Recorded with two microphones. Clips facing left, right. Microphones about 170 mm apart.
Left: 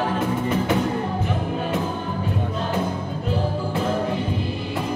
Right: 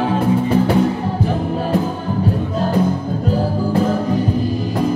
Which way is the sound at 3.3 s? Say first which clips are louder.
Right 6 dB; 40° right (ahead or behind).